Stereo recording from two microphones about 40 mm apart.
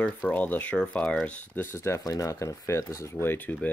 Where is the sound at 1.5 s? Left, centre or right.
Left.